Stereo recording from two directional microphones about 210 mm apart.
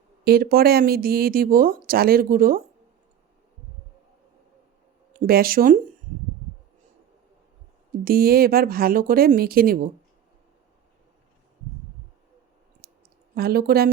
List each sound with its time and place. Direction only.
0.3 s speech: 45° right (ahead or behind)
5.2 s speech: 45° right (ahead or behind)
8.0 s speech: 45° right (ahead or behind)
12.8 s clicking: 45° right (ahead or behind)
13.3 s speech: 45° right (ahead or behind)